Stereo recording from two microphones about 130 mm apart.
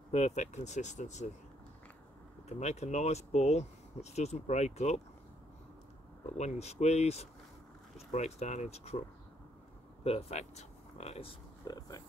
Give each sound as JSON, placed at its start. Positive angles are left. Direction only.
{"t": 0.1, "sound": "speech", "side_deg": 55}
{"t": 2.6, "sound": "speech", "side_deg": 60}
{"t": 6.3, "sound": "speech", "side_deg": 60}
{"t": 10.0, "sound": "speech", "side_deg": 50}
{"t": 11.6, "sound": "speech", "side_deg": 30}